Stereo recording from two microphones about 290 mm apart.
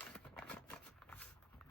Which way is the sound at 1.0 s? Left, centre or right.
Centre.